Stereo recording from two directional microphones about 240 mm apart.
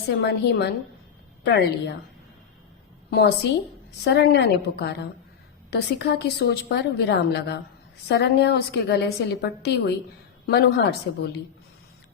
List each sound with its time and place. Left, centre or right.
0.1 s a woman's voice: left
3.1 s a woman's voice: left